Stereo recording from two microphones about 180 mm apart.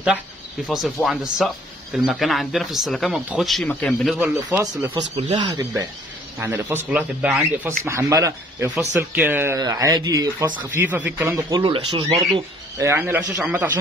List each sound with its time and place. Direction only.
0.7 s speech: centre (ahead or behind)
4.6 s speech: 15° right (ahead or behind)
5.1 s speech: 25° right (ahead or behind)
6.4 s speech: 10° right (ahead or behind)
7.6 s speech: 15° right (ahead or behind)
10.6 s speech: 10° right (ahead or behind); by 12.8 s 25° right (ahead or behind)
12.8 s speech: 10° right (ahead or behind)